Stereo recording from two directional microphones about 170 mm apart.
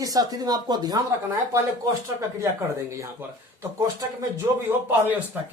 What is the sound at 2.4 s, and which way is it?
Speech, 15° right (ahead or behind).